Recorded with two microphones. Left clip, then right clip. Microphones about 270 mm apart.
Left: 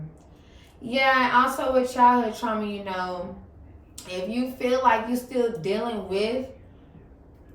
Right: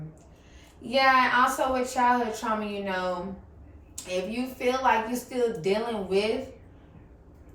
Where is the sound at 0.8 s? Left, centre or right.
Centre.